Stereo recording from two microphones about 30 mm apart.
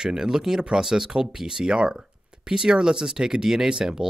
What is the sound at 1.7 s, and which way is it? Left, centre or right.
Speech, right.